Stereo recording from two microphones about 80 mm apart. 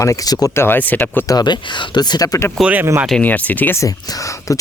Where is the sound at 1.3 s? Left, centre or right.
Left.